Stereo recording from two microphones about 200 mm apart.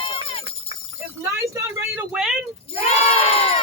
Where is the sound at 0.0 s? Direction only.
25° left (ahead or behind).